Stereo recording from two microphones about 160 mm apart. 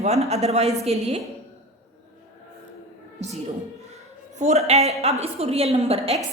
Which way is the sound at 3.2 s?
45° right (ahead or behind).